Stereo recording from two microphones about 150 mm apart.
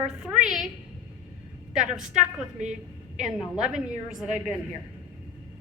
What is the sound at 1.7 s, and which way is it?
A woman's voice, 5° right (ahead or behind).